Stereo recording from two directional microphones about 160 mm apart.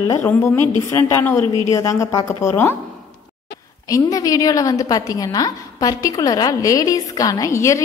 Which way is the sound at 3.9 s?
20° left (ahead or behind).